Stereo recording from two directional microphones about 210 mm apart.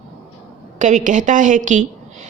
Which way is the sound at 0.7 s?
35° right (ahead or behind).